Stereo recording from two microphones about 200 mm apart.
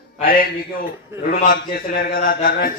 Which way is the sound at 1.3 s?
45° left (ahead or behind).